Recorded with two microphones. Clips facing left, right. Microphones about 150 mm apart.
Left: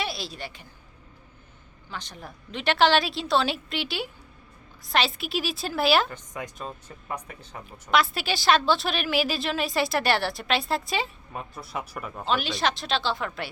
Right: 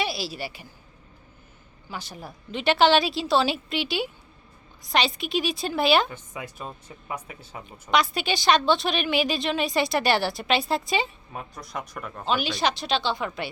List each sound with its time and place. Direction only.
0.0 s a woman's voice: 5° right (ahead or behind)
1.9 s a woman's voice: 10° right (ahead or behind)
7.6 s a woman's voice: centre (ahead or behind)